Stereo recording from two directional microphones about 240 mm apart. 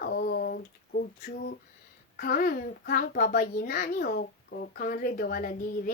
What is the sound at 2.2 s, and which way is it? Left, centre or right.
A woman's voice, left.